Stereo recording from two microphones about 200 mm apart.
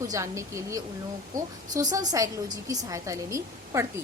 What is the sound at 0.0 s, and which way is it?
Speech, 15° right (ahead or behind).